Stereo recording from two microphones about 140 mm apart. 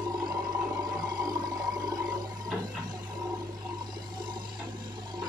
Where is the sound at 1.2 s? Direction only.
25° right (ahead or behind).